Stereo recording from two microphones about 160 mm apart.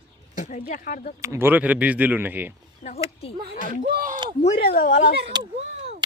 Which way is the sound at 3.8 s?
60° right (ahead or behind).